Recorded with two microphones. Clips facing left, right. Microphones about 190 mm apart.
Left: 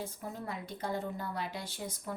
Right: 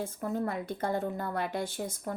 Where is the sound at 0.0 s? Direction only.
55° right (ahead or behind).